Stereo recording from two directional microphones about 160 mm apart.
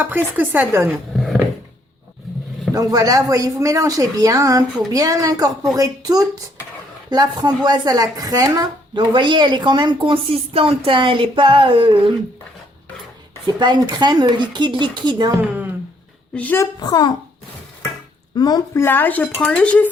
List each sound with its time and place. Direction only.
0.0 s speech: 10° right (ahead or behind)
1.1 s a sound: centre (ahead or behind)
2.7 s a woman's voice: 25° right (ahead or behind)
13.6 s a woman's voice: 25° right (ahead or behind)
16.3 s speech: 10° left (ahead or behind)
16.8 s speech: 25° left (ahead or behind)
18.3 s speech: 25° left (ahead or behind); by 19.9 s 5° left (ahead or behind)